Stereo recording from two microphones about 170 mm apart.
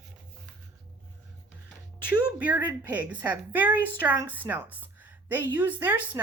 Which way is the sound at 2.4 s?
10° right (ahead or behind).